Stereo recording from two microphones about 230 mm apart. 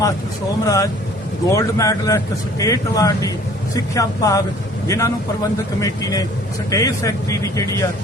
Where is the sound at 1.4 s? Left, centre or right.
Centre.